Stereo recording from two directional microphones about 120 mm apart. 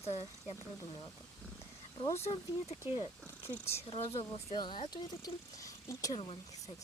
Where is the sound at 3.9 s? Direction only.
50° left (ahead or behind); by 6.1 s 30° left (ahead or behind).